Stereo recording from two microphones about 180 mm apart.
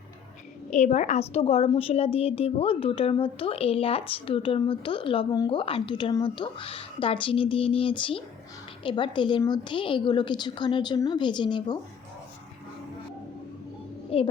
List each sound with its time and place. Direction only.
0.7 s a woman's voice: 40° left (ahead or behind); by 11.8 s 25° left (ahead or behind)
14.1 s a child's voice: 30° left (ahead or behind)